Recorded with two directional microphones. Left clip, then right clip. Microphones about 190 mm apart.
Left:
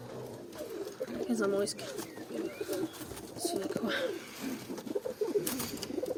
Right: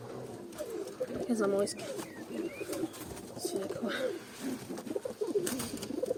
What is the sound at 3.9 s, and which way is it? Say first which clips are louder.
Speech: left 1 dB; 15° left (ahead or behind).